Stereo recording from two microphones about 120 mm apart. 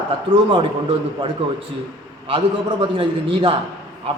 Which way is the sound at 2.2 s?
45° right (ahead or behind).